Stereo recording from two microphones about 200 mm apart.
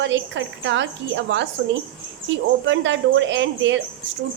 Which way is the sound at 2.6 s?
70° right (ahead or behind).